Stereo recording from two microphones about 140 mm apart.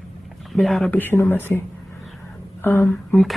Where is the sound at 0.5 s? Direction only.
Centre (ahead or behind).